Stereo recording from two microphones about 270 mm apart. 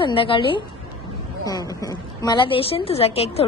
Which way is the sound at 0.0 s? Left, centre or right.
Centre.